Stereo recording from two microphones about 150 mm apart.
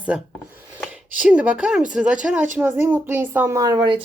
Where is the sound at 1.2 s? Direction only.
10° right (ahead or behind).